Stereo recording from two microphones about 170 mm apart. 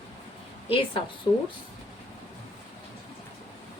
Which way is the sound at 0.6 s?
35° left (ahead or behind).